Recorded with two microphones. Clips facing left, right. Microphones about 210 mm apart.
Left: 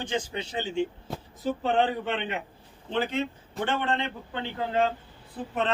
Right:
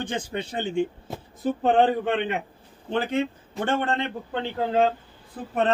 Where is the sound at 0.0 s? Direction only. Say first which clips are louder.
Right 1 dB; 55° right (ahead or behind).